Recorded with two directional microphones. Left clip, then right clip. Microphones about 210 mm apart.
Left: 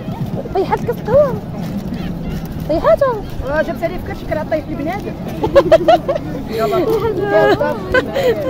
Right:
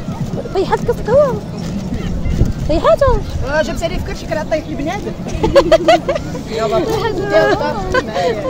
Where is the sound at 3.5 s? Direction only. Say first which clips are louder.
Right 1 dB; 45° right (ahead or behind).